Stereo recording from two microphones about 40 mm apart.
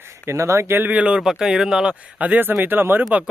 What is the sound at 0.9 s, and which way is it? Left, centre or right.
Speech, right.